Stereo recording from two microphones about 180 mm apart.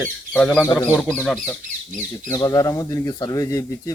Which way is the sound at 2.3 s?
20° left (ahead or behind).